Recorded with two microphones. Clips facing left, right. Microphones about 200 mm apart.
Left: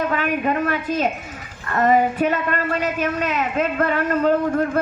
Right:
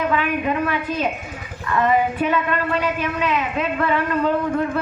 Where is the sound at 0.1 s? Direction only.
45° left (ahead or behind).